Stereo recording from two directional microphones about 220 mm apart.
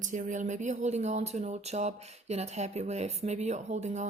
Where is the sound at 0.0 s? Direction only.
35° right (ahead or behind).